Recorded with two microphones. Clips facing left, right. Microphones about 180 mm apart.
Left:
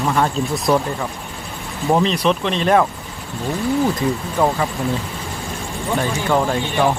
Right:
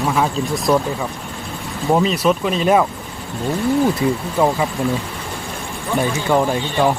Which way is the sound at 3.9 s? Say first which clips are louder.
Right 2 dB; 10° right (ahead or behind).